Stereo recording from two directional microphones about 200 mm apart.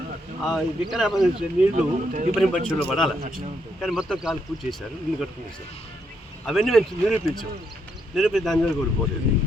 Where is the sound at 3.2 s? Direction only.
45° right (ahead or behind).